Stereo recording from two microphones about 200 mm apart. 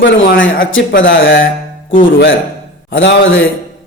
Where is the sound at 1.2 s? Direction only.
45° left (ahead or behind).